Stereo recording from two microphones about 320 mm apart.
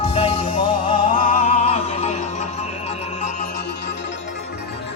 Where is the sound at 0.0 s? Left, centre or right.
Centre.